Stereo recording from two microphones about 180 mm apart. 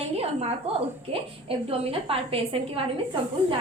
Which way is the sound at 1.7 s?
30° right (ahead or behind).